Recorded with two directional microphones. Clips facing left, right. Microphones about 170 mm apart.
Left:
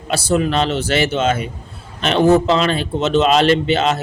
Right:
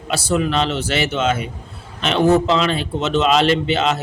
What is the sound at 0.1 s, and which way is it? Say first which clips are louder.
A man's voice: left 2 dB; 40° left (ahead or behind).